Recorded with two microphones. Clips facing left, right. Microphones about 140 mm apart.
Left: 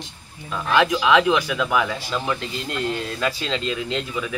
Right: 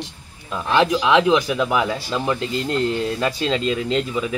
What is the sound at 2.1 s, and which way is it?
Speech, 20° right (ahead or behind).